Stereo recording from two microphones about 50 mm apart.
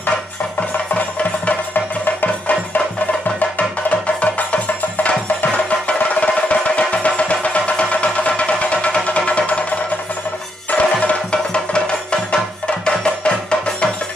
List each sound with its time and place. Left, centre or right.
0.6 s music: left
3.3 s music: left
10.7 s music: left